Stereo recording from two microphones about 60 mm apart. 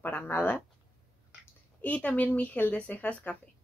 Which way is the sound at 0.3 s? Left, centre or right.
Left.